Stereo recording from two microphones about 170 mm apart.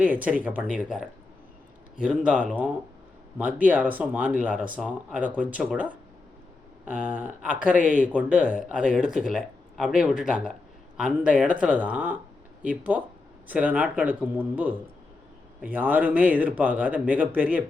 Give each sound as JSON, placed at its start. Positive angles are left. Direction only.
{"t": 0.0, "sound": "speech", "side_deg": -10}